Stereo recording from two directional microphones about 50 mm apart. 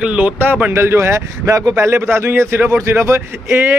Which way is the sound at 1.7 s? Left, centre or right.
Right.